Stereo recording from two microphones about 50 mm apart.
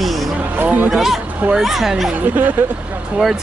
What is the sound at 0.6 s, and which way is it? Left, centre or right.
Speech, right.